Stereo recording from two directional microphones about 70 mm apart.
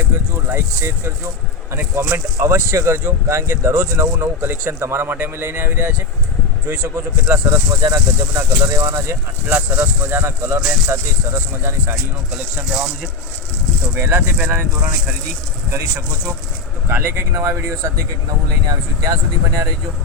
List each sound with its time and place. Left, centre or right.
0.5 s speech: right
7.8 s speech: right
9.5 s speech: right
12.7 s speech: centre
13.9 s speech: right
16.9 s speech: right
18.7 s speech: right